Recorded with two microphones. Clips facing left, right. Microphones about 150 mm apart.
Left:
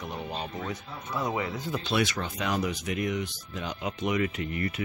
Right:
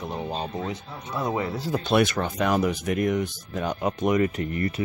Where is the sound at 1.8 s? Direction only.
50° right (ahead or behind).